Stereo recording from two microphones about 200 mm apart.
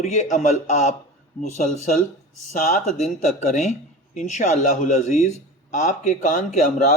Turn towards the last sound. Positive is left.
turn(degrees=40)  # may be behind; listen again after turning